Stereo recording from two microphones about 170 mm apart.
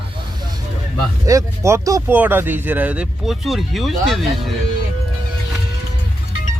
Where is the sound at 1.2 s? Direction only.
15° right (ahead or behind); by 4.2 s centre (ahead or behind).